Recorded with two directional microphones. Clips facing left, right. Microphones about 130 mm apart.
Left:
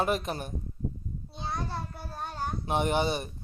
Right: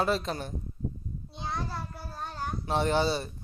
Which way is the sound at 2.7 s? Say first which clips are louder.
Right 1 dB; 15° left (ahead or behind).